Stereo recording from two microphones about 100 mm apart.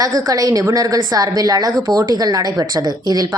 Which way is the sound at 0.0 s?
35° right (ahead or behind).